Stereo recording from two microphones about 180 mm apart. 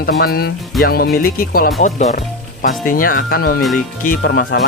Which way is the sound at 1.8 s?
40° left (ahead or behind).